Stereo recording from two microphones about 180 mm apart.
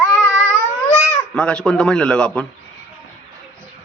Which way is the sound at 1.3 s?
5° left (ahead or behind).